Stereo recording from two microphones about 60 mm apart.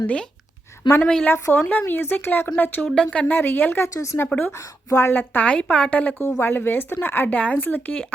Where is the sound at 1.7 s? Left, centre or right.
Left.